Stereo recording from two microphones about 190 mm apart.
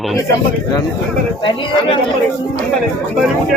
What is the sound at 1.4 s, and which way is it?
Speech, 25° left (ahead or behind).